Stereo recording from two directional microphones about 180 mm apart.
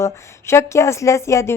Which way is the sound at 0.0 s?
15° left (ahead or behind).